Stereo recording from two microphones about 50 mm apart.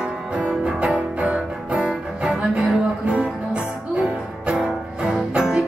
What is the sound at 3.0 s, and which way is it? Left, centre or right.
Music, right.